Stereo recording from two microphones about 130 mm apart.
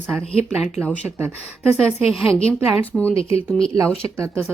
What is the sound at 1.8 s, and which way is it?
A woman's voice, 5° left (ahead or behind).